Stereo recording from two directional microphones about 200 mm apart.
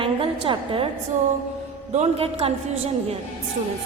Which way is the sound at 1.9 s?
30° right (ahead or behind).